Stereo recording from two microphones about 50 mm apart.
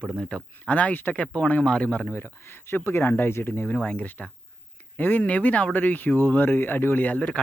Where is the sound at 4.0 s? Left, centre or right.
Left.